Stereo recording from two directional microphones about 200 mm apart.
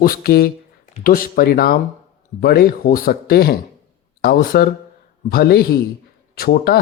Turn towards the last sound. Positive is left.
turn(degrees=50)  # may be behind; listen again after turning